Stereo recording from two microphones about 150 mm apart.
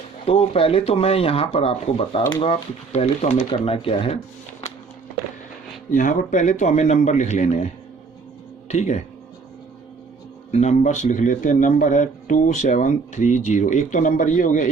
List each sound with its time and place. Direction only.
0.3 s a man's voice: 40° left (ahead or behind)
5.9 s a man's voice: 60° left (ahead or behind)
10.5 s speech: 50° left (ahead or behind)